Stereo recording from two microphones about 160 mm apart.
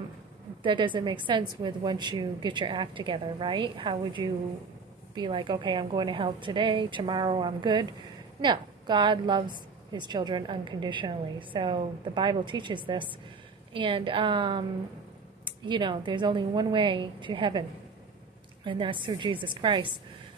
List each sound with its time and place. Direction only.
0.6 s a woman's voice: 30° right (ahead or behind)